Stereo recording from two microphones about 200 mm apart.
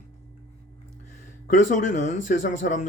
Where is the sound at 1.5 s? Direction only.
40° left (ahead or behind).